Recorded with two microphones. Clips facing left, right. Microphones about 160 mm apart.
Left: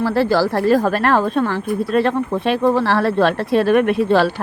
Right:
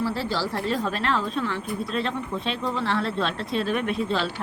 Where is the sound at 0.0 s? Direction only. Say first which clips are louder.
Left 10 dB; 65° left (ahead or behind).